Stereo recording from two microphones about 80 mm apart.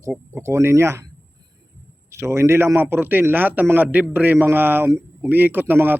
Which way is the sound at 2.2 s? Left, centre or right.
Right.